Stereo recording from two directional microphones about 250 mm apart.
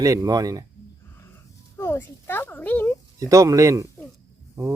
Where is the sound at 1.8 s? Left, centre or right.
Centre.